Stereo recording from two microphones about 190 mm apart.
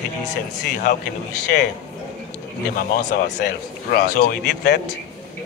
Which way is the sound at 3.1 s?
50° left (ahead or behind).